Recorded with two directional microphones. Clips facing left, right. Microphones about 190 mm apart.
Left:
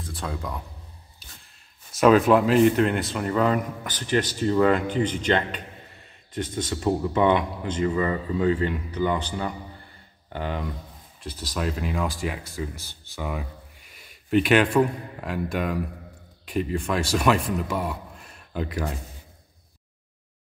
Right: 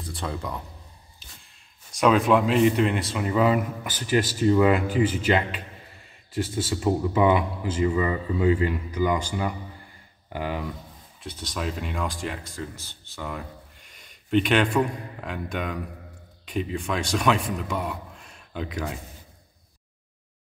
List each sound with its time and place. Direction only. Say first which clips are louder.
0.0 s speech: right 1 dB; centre (ahead or behind)
1.9 s a man's voice: left 3 dB; 5° left (ahead or behind)